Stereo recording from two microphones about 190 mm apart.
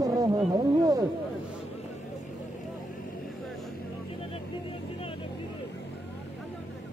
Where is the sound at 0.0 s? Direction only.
20° right (ahead or behind).